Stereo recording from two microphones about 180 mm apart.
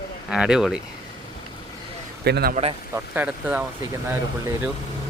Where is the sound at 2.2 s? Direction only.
60° right (ahead or behind).